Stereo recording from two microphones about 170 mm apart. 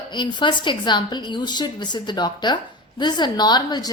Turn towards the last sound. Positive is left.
turn(degrees=25)  # may be behind; listen again after turning